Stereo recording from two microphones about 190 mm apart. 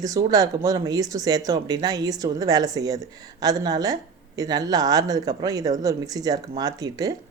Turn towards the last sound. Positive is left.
turn(degrees=-20)  # may be behind; listen again after turning